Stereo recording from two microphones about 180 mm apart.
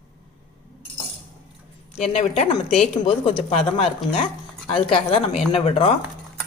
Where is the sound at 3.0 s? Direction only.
30° left (ahead or behind).